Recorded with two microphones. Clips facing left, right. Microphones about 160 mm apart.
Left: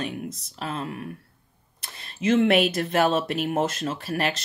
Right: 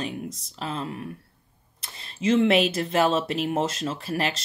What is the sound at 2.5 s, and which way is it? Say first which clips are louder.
Speech: even; 30° right (ahead or behind).